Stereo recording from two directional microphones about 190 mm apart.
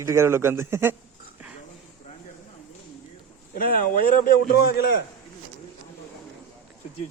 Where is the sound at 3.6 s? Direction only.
50° left (ahead or behind).